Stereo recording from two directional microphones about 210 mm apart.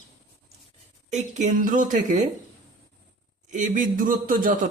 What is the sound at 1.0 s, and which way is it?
Speech, 35° right (ahead or behind).